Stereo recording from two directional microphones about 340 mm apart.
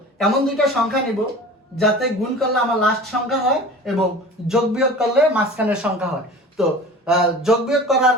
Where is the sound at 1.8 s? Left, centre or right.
Centre.